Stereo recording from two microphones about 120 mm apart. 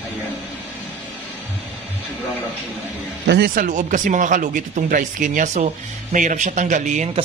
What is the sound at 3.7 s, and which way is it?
Speech, 90° right.